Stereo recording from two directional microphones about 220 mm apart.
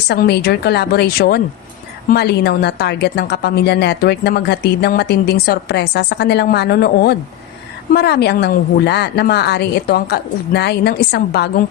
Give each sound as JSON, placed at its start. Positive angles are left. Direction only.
{"t": 0.1, "sound": "a woman's voice", "side_deg": 45}